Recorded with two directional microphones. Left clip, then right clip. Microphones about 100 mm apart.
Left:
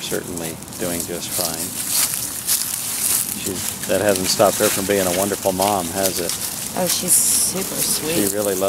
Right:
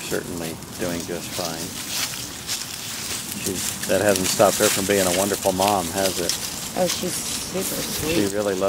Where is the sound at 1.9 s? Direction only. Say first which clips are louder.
Left 4 dB; 35° left (ahead or behind).